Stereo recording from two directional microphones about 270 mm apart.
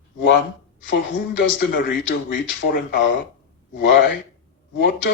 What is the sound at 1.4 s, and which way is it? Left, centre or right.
Speech, left.